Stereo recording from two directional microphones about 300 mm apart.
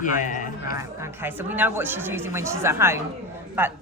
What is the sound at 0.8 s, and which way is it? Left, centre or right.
A man's voice, centre.